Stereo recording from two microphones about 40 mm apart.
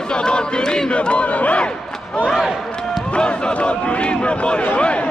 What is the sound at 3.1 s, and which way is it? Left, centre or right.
Speech, left.